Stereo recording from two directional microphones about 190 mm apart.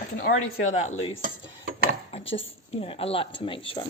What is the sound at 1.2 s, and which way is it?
Cutlery, 50° right (ahead or behind).